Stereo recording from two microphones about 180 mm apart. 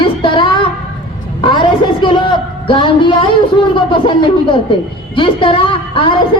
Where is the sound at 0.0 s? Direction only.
25° left (ahead or behind).